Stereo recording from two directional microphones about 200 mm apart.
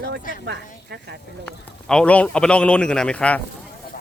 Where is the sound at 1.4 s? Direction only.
5° left (ahead or behind).